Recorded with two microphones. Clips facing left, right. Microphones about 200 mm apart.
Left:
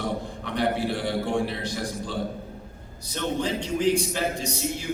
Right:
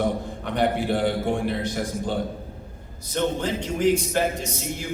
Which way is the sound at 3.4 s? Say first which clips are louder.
Left 2 dB; 50° right (ahead or behind).